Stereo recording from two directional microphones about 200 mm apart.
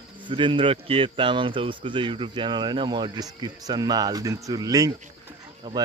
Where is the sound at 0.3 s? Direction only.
25° right (ahead or behind).